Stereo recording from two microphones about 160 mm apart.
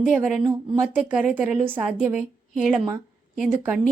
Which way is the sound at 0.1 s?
10° right (ahead or behind).